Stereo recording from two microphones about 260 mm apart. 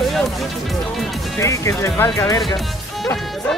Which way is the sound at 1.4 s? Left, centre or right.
Centre.